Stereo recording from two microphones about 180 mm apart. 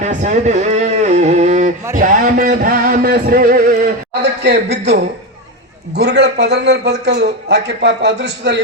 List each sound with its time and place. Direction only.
0.0 s a sound: 45° right (ahead or behind)
2.0 s music: 50° right (ahead or behind)
4.4 s a man's voice: 70° right (ahead or behind)